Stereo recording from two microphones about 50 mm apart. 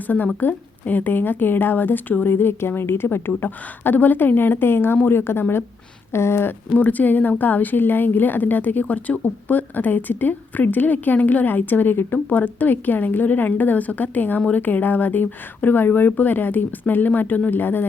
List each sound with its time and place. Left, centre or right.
0.3 s a woman's voice: left
2.3 s a woman's voice: left
6.1 s a sound: left
6.7 s a woman's voice: left